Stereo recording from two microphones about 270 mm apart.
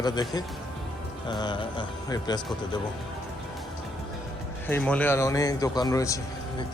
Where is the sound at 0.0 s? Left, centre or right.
Centre.